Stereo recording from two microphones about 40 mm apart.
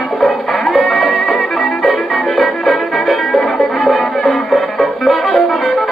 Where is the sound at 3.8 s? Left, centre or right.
Centre.